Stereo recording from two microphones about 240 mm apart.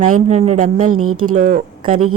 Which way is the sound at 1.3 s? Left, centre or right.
Right.